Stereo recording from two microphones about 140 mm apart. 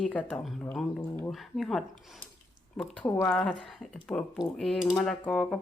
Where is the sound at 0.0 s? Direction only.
10° left (ahead or behind).